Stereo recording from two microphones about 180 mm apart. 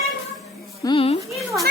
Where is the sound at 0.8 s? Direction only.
30° left (ahead or behind).